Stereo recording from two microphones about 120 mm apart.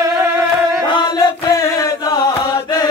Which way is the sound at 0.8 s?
40° left (ahead or behind).